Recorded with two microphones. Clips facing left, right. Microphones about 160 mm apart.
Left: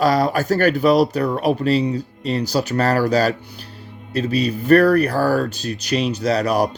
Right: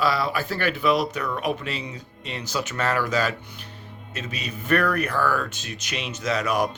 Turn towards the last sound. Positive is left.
turn(degrees=35)  # may be behind; listen again after turning